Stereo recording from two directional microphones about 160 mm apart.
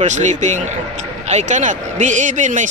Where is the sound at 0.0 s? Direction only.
50° right (ahead or behind).